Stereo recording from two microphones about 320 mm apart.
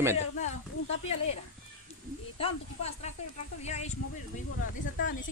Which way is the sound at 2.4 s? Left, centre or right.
Centre.